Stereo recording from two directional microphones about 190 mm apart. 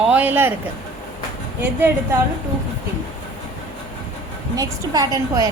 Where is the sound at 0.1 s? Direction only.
10° right (ahead or behind).